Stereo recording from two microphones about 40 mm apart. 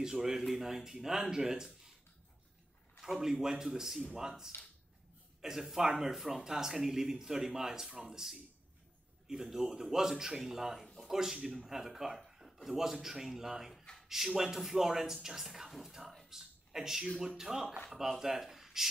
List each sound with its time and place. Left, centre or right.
0.0 s speech: centre
3.2 s speech: centre
4.5 s a sound: left
5.4 s speech: centre
16.3 s a sound: centre
17.2 s speech: centre